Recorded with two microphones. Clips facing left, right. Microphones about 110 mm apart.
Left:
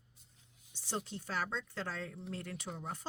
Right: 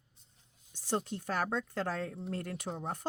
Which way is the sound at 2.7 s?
35° right (ahead or behind).